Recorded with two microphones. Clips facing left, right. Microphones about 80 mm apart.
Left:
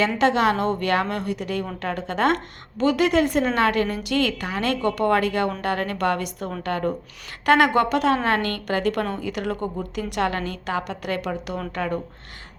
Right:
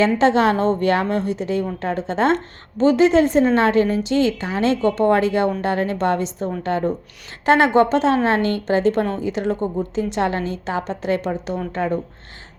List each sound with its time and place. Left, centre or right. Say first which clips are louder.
0.0 s a woman's voice: right 4 dB; right